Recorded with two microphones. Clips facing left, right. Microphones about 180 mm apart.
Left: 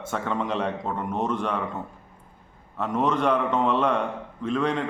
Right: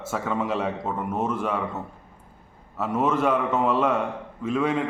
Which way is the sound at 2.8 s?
5° right (ahead or behind).